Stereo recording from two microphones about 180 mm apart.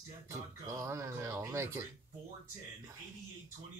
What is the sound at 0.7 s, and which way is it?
Speech, 15° right (ahead or behind).